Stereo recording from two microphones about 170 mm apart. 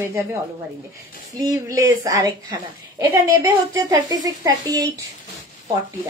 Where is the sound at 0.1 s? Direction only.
15° right (ahead or behind).